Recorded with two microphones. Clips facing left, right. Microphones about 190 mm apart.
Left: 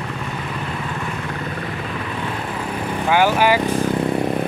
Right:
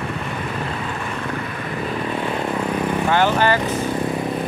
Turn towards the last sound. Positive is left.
turn(degrees=10)  # may be behind; listen again after turning